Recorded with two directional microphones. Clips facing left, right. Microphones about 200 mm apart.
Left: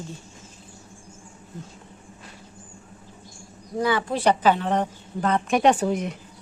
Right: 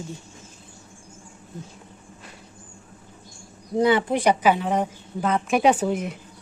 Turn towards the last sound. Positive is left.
turn(degrees=0)  # may be behind; listen again after turning